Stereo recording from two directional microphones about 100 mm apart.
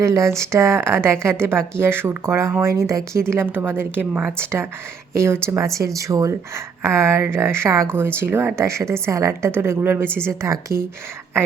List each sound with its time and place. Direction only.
0.0 s speech: 30° right (ahead or behind)